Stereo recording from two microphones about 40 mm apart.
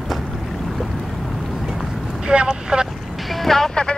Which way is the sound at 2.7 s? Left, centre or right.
Right.